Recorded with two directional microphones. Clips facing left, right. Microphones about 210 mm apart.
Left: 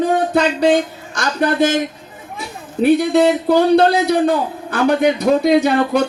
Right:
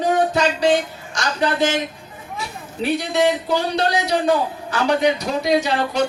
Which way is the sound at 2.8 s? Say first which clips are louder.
Left 7 dB; 55° left (ahead or behind).